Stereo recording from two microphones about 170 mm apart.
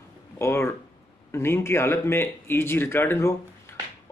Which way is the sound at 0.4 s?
15° left (ahead or behind).